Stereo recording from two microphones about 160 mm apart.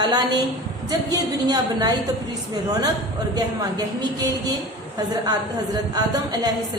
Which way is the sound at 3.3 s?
25° right (ahead or behind).